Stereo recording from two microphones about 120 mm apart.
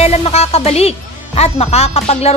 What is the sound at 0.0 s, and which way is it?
Speech, 60° left (ahead or behind).